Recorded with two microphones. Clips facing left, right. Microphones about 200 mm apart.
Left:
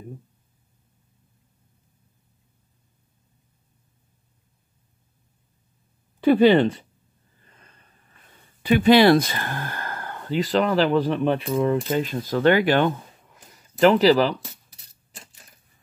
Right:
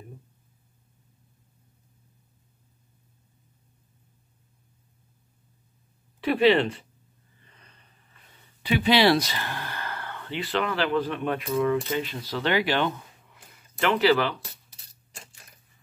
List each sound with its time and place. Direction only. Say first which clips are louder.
7.5 s a sound: left 3 dB; 50° left (ahead or behind)
8.6 s speech: left 6 dB; 50° left (ahead or behind)
11.9 s speech: left 6 dB; 50° left (ahead or behind)